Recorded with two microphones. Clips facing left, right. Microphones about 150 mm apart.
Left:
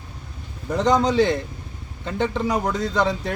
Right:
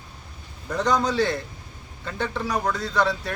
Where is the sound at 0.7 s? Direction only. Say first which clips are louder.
Left 4 dB; 20° left (ahead or behind).